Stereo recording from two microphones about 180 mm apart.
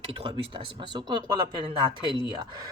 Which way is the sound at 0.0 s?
30° right (ahead or behind).